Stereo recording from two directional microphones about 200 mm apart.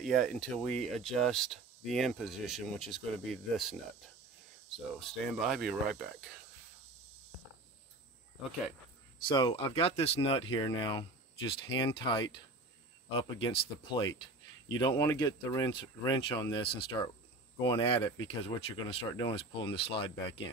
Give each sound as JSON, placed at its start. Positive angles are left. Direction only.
{"t": 0.0, "sound": "speech", "side_deg": 0}
{"t": 5.0, "sound": "speech", "side_deg": 0}
{"t": 9.2, "sound": "speech", "side_deg": 25}